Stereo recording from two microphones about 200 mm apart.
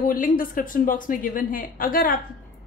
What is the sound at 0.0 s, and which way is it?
A woman's voice, 45° left (ahead or behind).